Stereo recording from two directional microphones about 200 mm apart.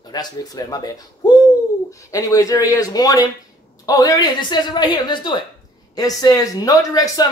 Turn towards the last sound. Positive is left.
turn(degrees=20)  # may be behind; listen again after turning